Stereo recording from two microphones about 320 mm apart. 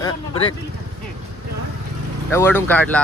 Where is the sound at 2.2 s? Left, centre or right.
Centre.